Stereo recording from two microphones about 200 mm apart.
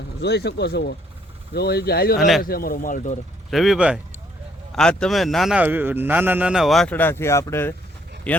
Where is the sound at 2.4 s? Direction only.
50° left (ahead or behind).